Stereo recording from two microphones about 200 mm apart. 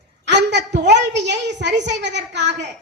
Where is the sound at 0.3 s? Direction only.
60° right (ahead or behind).